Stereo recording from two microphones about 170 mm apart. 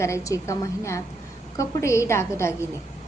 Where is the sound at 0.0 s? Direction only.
15° left (ahead or behind).